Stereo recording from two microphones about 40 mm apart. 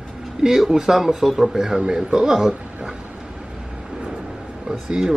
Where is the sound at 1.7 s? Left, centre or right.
Centre.